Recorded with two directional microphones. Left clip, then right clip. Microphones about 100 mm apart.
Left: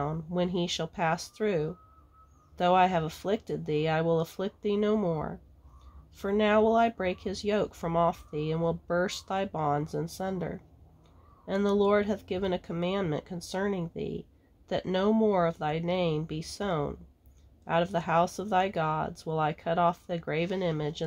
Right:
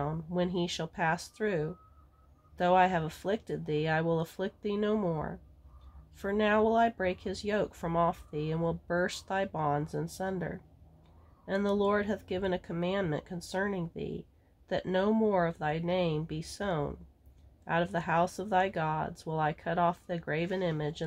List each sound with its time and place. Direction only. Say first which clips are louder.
0.0 s speech: left 2 dB; 25° left (ahead or behind)